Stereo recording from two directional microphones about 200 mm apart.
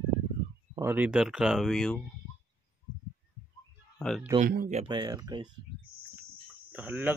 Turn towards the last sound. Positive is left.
turn(degrees=-10)  # may be behind; listen again after turning